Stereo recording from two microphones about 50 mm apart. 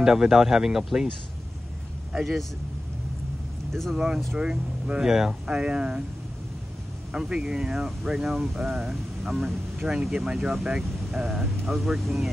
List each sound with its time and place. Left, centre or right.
0.0 s speech: centre
3.9 s speech: centre
7.1 s speech: centre